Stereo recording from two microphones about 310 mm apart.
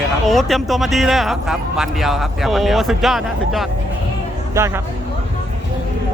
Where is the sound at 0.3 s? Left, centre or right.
Centre.